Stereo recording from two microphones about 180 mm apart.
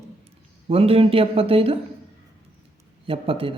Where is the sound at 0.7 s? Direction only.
35° right (ahead or behind).